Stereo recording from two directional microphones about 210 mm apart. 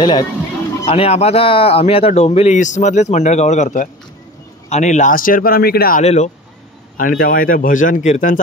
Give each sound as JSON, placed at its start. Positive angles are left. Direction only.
{"t": 0.0, "sound": "speech", "side_deg": 20}
{"t": 6.0, "sound": "speech", "side_deg": 30}